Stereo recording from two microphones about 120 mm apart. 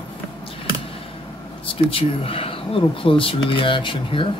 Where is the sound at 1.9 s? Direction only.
50° left (ahead or behind).